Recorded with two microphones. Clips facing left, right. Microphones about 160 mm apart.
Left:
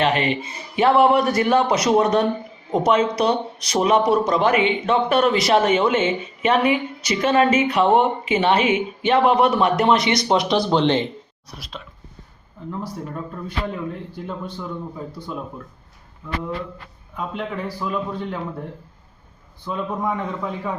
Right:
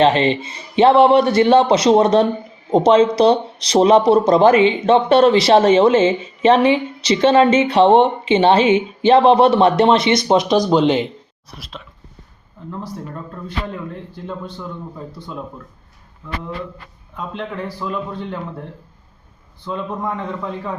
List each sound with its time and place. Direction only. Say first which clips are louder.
0.0 s speech: right 6 dB; 30° right (ahead or behind); by 11.1 s 10° right (ahead or behind)
11.5 s a man's voice: right 1 dB; centre (ahead or behind)
13.1 s a man's voice: even; 5° left (ahead or behind)
17.2 s a man's voice: right 1 dB; 5° left (ahead or behind)
19.6 s a man's voice: even; 5° left (ahead or behind)